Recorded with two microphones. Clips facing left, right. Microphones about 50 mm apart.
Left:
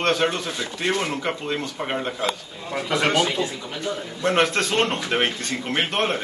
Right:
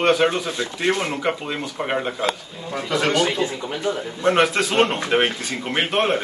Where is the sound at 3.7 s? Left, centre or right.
Centre.